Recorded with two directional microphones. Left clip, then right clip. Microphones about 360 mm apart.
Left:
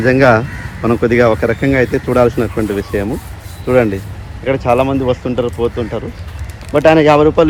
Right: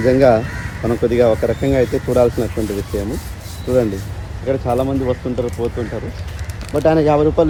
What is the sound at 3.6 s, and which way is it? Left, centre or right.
Speech, left.